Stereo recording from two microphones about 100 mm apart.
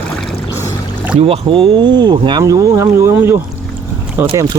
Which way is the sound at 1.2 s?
70° right (ahead or behind).